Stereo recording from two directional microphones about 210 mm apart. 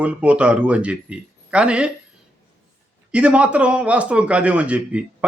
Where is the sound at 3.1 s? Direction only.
5° right (ahead or behind).